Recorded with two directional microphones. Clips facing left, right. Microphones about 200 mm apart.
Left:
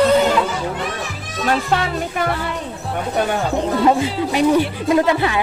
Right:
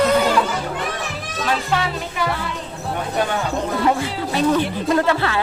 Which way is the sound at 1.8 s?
50° left (ahead or behind).